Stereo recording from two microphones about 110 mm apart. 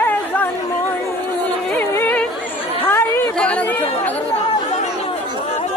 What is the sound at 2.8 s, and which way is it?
Chatter, 20° left (ahead or behind).